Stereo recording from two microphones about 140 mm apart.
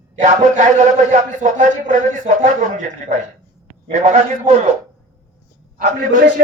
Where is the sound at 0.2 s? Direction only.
60° right (ahead or behind).